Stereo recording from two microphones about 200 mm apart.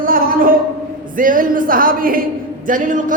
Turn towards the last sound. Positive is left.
turn(degrees=-40)  # may be behind; listen again after turning